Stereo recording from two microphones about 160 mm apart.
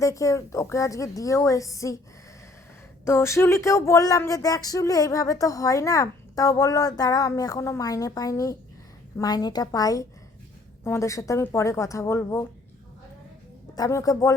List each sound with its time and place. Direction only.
0.0 s speech: 20° left (ahead or behind)
3.0 s speech: 15° left (ahead or behind)
13.7 s speech: 20° left (ahead or behind)